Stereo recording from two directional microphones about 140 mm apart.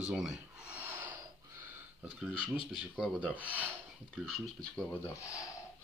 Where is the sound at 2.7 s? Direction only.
5° right (ahead or behind).